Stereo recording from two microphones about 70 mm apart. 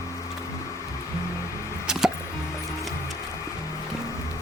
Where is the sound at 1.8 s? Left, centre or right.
Centre.